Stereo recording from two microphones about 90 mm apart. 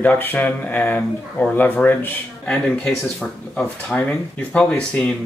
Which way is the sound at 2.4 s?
10° left (ahead or behind).